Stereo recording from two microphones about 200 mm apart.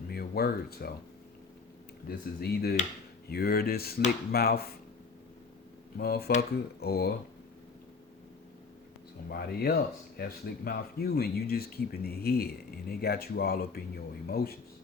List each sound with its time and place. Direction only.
0.1 s speech: 50° left (ahead or behind)
2.0 s speech: 50° left (ahead or behind)
6.0 s speech: 50° left (ahead or behind)
9.3 s speech: 50° left (ahead or behind)